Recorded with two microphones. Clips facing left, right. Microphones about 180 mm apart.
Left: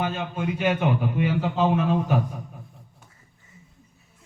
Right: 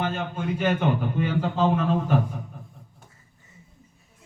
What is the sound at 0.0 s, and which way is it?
A man's voice, 15° left (ahead or behind).